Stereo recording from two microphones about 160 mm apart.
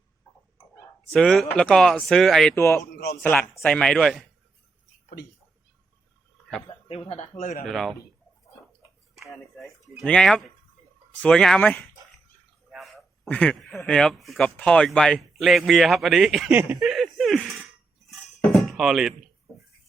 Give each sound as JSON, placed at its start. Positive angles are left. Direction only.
{"t": 1.1, "sound": "speech", "side_deg": 0}
{"t": 2.6, "sound": "speech", "side_deg": 15}
{"t": 2.9, "sound": "a sound", "side_deg": 80}
{"t": 3.5, "sound": "speech", "side_deg": 10}
{"t": 6.7, "sound": "speech", "side_deg": 35}
{"t": 7.3, "sound": "speech", "side_deg": 60}
{"t": 7.6, "sound": "speech", "side_deg": 0}
{"t": 9.6, "sound": "speech", "side_deg": 0}
{"t": 12.7, "sound": "a sound", "side_deg": 0}
{"t": 13.8, "sound": "speech", "side_deg": 5}
{"t": 16.5, "sound": "speech", "side_deg": -10}
{"t": 16.8, "sound": "a sound", "side_deg": 0}
{"t": 18.1, "sound": "cutlery", "side_deg": 0}